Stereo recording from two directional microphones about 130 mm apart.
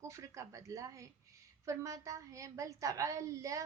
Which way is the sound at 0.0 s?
25° right (ahead or behind).